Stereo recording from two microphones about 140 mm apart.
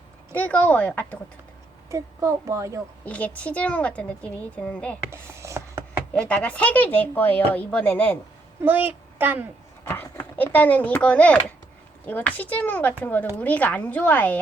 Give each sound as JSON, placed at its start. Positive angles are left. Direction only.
{"t": 0.3, "sound": "speech", "side_deg": 10}
{"t": 1.9, "sound": "a child's voice", "side_deg": -20}
{"t": 3.1, "sound": "speech", "side_deg": 10}
{"t": 5.1, "sound": "a sound", "side_deg": -20}
{"t": 6.1, "sound": "speech", "side_deg": 10}
{"t": 8.6, "sound": "a child's voice", "side_deg": -15}
{"t": 9.8, "sound": "speech", "side_deg": 15}